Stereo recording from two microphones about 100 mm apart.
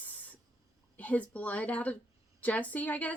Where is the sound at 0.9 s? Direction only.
15° left (ahead or behind).